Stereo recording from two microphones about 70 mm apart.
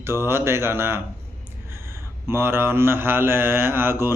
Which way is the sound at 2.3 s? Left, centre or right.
Right.